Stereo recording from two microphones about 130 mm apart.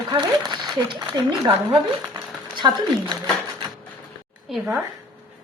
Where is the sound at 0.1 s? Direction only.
35° right (ahead or behind).